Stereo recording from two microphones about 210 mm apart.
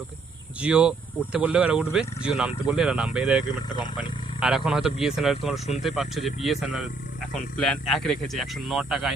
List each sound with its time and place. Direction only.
0.6 s speech: 5° right (ahead or behind)